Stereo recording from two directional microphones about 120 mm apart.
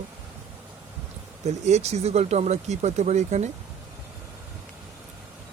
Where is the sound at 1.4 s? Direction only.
65° right (ahead or behind).